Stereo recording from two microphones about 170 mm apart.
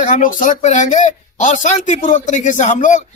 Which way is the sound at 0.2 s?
50° left (ahead or behind).